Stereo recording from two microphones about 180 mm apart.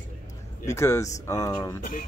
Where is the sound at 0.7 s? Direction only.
15° left (ahead or behind).